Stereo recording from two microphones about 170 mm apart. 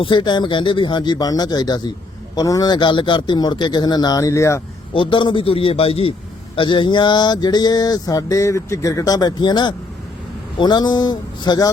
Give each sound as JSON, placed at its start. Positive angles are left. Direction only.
{"t": 0.0, "sound": "mantra", "side_deg": 25}
{"t": 4.9, "sound": "a man's voice", "side_deg": 30}
{"t": 6.6, "sound": "mantra", "side_deg": 30}